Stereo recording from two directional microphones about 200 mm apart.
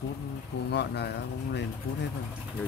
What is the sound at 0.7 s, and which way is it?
Speech, 60° left (ahead or behind).